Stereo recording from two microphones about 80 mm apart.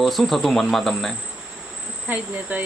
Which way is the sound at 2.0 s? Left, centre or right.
Centre.